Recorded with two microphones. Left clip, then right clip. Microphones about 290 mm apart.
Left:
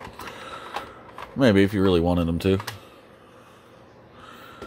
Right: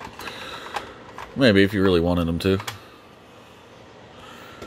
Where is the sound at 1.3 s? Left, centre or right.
Centre.